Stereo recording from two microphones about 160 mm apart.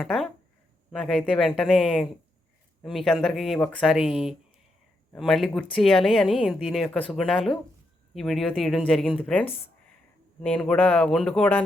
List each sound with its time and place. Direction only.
0.0 s speech: 5° left (ahead or behind)
4.0 s speech: 35° left (ahead or behind)
5.1 s speech: centre (ahead or behind)